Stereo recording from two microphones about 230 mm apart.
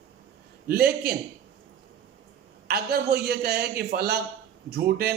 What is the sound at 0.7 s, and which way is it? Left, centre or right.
Speech, right.